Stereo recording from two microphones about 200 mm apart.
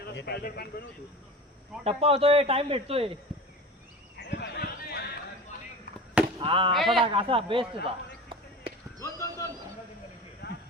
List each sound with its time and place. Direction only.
0.0 s speech: 55° left (ahead or behind)
1.8 s speech: 30° right (ahead or behind)
4.3 s basketball bounce: 55° left (ahead or behind)
6.4 s speech: 25° right (ahead or behind)
6.7 s a man's voice: centre (ahead or behind)
7.0 s speech: 30° right (ahead or behind)
7.9 s basketball bounce: 25° right (ahead or behind)
9.0 s a sound: 15° left (ahead or behind)
10.4 s a sound: 50° left (ahead or behind)